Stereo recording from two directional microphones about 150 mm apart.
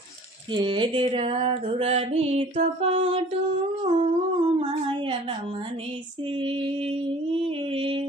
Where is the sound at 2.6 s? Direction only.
45° right (ahead or behind).